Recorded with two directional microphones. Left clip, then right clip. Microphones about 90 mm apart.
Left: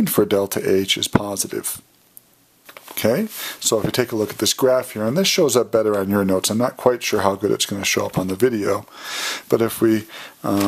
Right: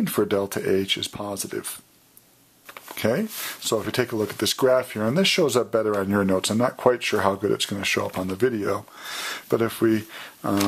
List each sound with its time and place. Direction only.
0.0 s speech: 35° left (ahead or behind)
2.9 s speech: 35° left (ahead or behind)